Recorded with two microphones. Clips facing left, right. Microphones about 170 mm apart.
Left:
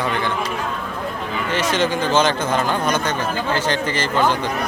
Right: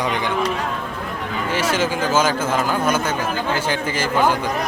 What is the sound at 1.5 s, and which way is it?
A man's voice, 10° right (ahead or behind).